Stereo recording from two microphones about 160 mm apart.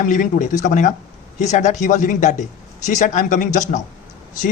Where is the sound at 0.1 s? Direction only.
50° left (ahead or behind).